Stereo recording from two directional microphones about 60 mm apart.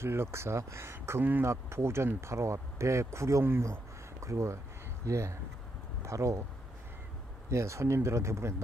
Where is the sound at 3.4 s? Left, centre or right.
Right.